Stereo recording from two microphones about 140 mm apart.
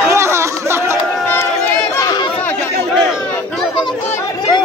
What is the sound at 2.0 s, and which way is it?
Chatter, 30° left (ahead or behind).